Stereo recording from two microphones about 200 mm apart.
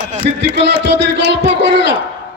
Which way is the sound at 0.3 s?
60° right (ahead or behind).